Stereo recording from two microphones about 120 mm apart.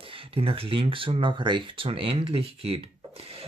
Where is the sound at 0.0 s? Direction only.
50° right (ahead or behind).